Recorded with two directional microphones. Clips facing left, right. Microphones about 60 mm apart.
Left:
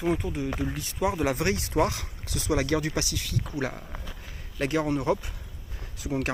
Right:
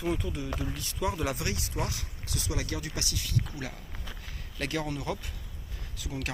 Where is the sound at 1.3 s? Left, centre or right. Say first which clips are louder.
Left 9 dB; left.